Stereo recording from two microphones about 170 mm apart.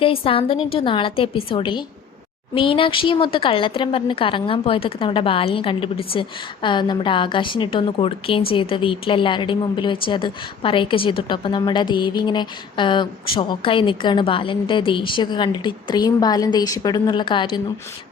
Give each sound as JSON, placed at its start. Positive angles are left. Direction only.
{"t": 0.0, "sound": "a woman's voice", "side_deg": 30}